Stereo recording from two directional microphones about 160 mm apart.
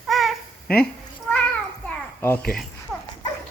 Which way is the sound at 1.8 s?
10° left (ahead or behind).